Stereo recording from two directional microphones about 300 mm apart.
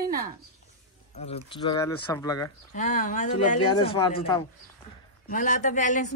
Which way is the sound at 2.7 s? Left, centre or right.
Left.